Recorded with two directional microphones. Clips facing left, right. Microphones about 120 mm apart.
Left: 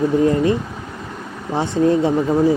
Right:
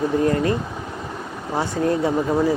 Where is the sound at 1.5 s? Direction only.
25° left (ahead or behind).